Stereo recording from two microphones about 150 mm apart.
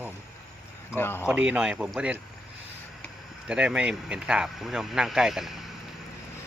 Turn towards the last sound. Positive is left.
turn(degrees=0)  # may be behind; listen again after turning